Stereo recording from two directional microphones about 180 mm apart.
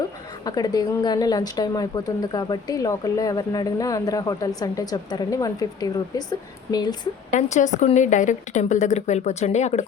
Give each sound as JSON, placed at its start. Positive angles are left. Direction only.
{"t": 0.4, "sound": "a woman's voice", "side_deg": 20}
{"t": 7.3, "sound": "a woman's voice", "side_deg": 40}